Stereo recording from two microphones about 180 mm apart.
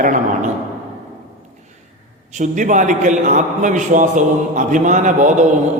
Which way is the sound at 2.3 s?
45° right (ahead or behind).